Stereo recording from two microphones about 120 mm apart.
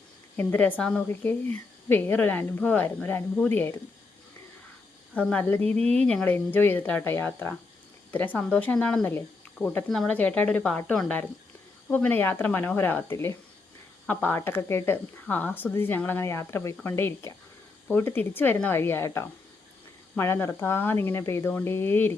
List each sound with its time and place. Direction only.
0.3 s speech: 15° left (ahead or behind)
5.1 s speech: 10° left (ahead or behind)